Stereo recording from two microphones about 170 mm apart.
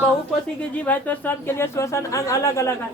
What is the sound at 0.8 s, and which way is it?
A woman's voice, 10° left (ahead or behind).